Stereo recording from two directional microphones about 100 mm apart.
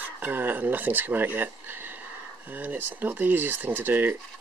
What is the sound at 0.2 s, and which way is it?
Speech, 20° right (ahead or behind).